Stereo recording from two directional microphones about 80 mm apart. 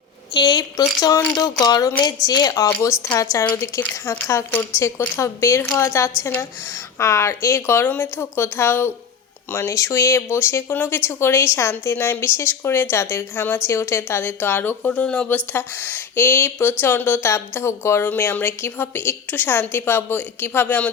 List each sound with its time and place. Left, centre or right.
0.3 s a woman's voice: left
3.5 s a woman's voice: left